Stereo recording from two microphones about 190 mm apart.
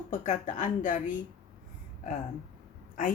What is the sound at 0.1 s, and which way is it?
A woman's voice, 40° left (ahead or behind).